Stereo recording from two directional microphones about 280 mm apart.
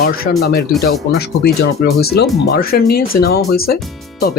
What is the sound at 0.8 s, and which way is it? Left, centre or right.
Speech, left.